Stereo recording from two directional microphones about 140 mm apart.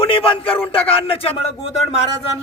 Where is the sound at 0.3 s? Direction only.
40° left (ahead or behind).